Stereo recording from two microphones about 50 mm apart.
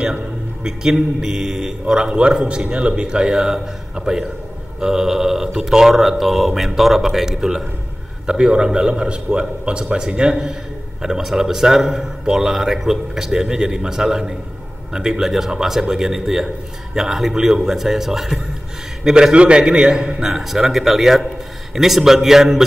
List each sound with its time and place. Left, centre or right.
1.2 s a man's voice: centre
19.3 s a man's voice: right